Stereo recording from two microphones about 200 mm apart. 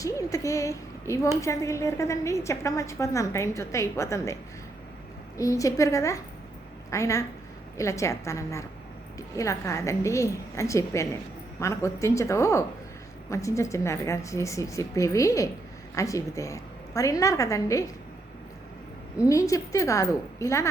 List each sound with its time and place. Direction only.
0.0 s a woman's voice: 15° left (ahead or behind)
5.4 s a woman's voice: 15° left (ahead or behind)
19.2 s a woman's voice: 15° left (ahead or behind)